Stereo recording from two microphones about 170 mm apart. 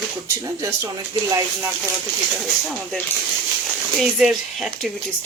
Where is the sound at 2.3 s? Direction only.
Centre (ahead or behind).